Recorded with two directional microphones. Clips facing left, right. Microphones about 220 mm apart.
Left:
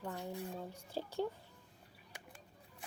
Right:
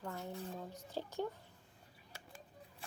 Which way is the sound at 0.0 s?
15° left (ahead or behind).